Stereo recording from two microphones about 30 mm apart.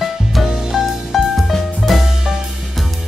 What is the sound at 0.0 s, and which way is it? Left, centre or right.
Music, centre.